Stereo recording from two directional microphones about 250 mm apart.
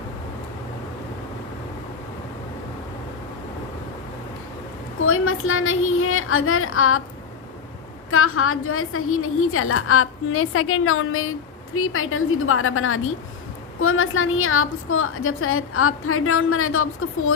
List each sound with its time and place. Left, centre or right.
4.9 s a woman's voice: left
8.1 s a woman's voice: left